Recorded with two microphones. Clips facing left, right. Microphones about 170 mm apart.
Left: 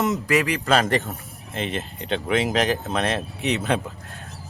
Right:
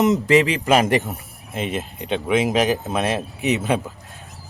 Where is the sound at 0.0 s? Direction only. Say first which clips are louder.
Right 6 dB; 20° right (ahead or behind).